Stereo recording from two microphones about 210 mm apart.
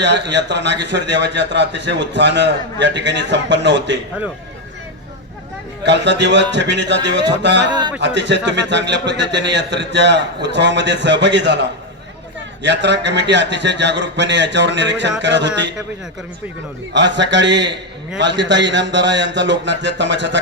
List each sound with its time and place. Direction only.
0.0 s a man's voice: 55° right (ahead or behind)
5.8 s a man's voice: 55° right (ahead or behind)
7.7 s a man's voice: 20° right (ahead or behind)
7.9 s a man's voice: 55° right (ahead or behind)
16.9 s a man's voice: 55° right (ahead or behind)